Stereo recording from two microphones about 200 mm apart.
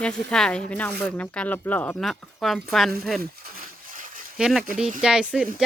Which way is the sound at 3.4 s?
45° right (ahead or behind).